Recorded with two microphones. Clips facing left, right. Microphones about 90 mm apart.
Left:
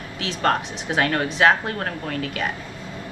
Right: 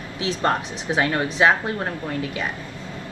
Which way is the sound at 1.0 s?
15° right (ahead or behind).